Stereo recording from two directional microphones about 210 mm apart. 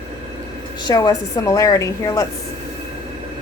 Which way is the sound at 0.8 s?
20° left (ahead or behind).